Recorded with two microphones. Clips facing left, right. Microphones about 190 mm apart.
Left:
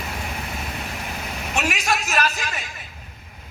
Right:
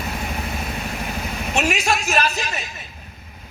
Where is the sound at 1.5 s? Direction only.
25° right (ahead or behind).